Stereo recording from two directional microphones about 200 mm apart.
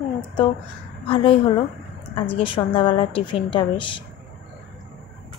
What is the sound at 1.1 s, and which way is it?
A woman's voice, 25° left (ahead or behind).